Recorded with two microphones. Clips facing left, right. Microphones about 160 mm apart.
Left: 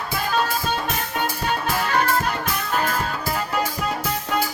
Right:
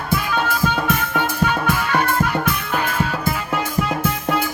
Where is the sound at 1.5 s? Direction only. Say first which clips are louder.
Right 3 dB; 45° left (ahead or behind).